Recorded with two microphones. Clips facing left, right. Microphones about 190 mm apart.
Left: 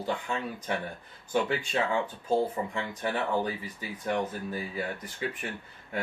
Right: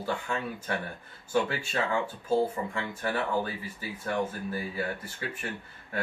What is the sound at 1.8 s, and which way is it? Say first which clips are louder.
Speech: right 1 dB; 20° left (ahead or behind).